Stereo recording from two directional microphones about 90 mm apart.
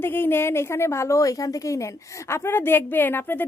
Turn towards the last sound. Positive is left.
turn(degrees=20)  # may be behind; listen again after turning